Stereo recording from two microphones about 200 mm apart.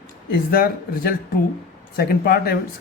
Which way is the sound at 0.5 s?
45° left (ahead or behind).